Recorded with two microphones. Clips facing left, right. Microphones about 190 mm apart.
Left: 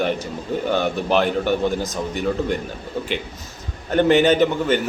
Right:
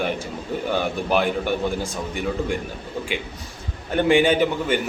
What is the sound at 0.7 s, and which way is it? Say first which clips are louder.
A man's voice: left 2 dB; 10° right (ahead or behind).